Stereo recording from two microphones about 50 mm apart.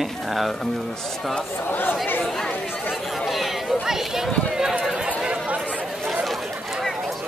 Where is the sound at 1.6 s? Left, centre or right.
Left.